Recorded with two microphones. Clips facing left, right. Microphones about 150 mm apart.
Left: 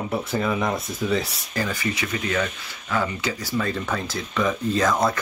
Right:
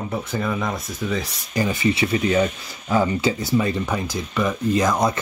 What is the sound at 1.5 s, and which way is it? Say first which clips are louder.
Speech: right 6 dB; 20° right (ahead or behind).